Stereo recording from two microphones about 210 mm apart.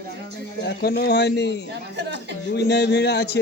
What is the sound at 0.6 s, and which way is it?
Speech, 50° left (ahead or behind).